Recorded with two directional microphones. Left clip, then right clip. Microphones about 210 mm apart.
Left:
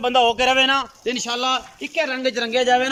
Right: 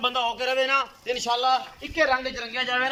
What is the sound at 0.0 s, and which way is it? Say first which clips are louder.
A man's voice: left 8 dB; 55° left (ahead or behind).